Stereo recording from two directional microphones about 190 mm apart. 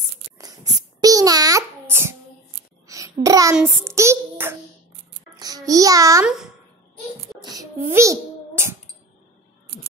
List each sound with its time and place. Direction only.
1.0 s babbling: 20° right (ahead or behind)
2.9 s a sound: 15° right (ahead or behind)
3.8 s child singing: 15° right (ahead or behind)
5.3 s a child's voice: 20° right (ahead or behind)
6.2 s speech: centre (ahead or behind)
7.3 s a sound: 20° right (ahead or behind)